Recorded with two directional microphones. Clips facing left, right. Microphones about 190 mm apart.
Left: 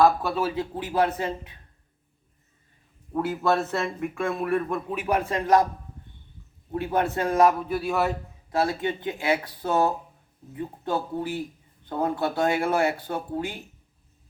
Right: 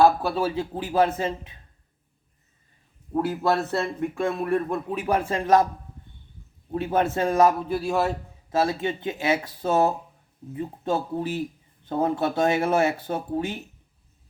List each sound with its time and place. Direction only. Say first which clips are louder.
0.0 s speech: right 1 dB; 30° right (ahead or behind)
3.1 s a man's voice: right 1 dB; 35° right (ahead or behind)
6.7 s speech: right 2 dB; 25° right (ahead or behind)